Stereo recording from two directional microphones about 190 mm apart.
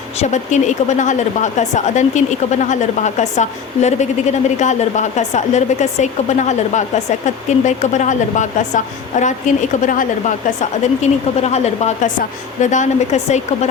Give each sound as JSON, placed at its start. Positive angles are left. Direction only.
{"t": 0.2, "sound": "speech", "side_deg": 40}